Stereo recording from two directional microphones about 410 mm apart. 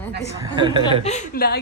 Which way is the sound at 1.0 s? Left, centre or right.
Centre.